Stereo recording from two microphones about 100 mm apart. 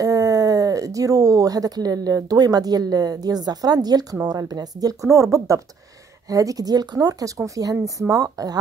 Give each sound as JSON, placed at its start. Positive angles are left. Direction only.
{"t": 0.0, "sound": "speech", "side_deg": -35}